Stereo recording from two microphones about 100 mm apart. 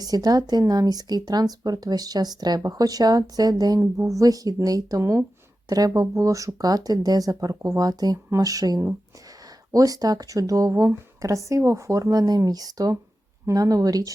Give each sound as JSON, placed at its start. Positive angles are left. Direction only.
{"t": 0.0, "sound": "speech", "side_deg": -40}